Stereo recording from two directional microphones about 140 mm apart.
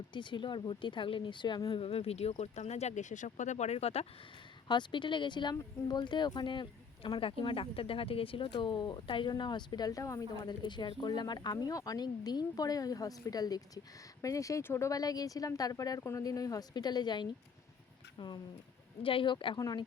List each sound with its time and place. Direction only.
0.1 s speech: 35° left (ahead or behind)
1.8 s speech: 45° left (ahead or behind)
4.7 s speech: 35° left (ahead or behind)